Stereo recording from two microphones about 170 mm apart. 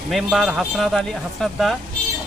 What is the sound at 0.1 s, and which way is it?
Speech, centre (ahead or behind).